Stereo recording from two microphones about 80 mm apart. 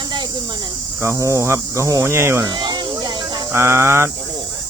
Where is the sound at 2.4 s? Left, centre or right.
Right.